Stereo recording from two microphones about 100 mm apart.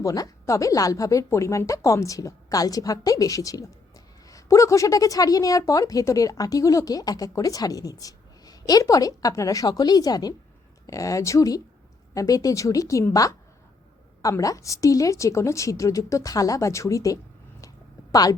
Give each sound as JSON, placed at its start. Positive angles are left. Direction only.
{"t": 0.0, "sound": "a woman's voice", "side_deg": 35}